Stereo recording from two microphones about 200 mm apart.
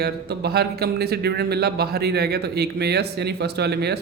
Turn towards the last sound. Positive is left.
turn(degrees=-55)  # may be behind; listen again after turning